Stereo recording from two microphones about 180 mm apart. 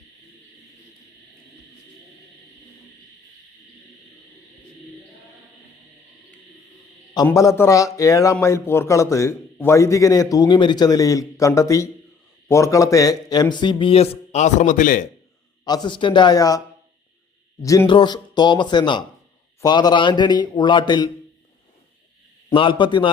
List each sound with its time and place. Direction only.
7.3 s a man's voice: 15° left (ahead or behind); by 15.0 s 45° left (ahead or behind)
15.6 s a man's voice: 25° left (ahead or behind)
17.6 s a man's voice: 15° left (ahead or behind)
22.4 s a man's voice: 30° left (ahead or behind)